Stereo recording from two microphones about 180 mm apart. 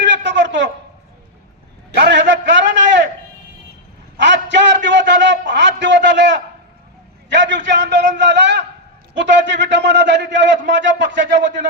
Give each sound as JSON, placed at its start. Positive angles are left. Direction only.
{"t": 0.0, "sound": "a sound", "side_deg": -80}
{"t": 2.0, "sound": "a man's voice", "side_deg": -75}
{"t": 4.2, "sound": "a man's voice", "side_deg": -80}